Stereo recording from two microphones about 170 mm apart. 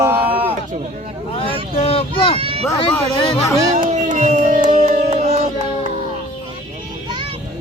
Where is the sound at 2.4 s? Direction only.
35° right (ahead or behind).